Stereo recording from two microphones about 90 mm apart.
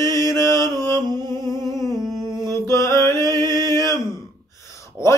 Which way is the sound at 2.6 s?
35° left (ahead or behind).